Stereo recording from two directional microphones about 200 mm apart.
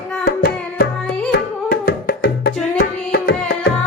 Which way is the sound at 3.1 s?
50° left (ahead or behind).